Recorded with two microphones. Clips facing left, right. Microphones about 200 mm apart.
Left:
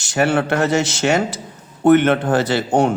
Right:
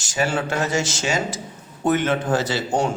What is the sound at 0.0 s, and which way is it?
A man's voice, 60° left (ahead or behind).